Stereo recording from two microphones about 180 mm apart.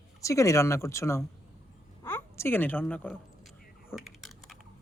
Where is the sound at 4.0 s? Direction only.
Centre (ahead or behind).